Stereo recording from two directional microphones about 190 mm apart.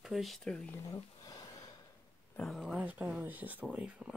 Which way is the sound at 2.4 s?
Centre (ahead or behind).